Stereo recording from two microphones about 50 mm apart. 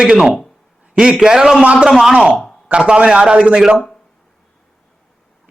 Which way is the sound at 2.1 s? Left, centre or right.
Right.